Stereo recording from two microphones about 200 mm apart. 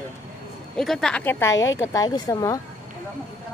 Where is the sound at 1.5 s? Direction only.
75° left (ahead or behind).